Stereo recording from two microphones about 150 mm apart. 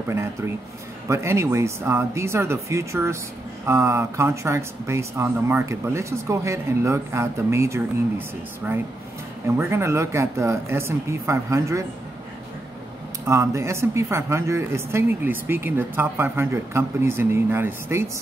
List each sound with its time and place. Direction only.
1.0 s speech: 20° right (ahead or behind)
9.6 s speech: 15° right (ahead or behind)
13.2 s speech: 20° right (ahead or behind)